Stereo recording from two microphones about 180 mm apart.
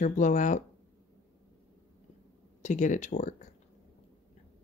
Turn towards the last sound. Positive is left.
turn(degrees=45)  # may be behind; listen again after turning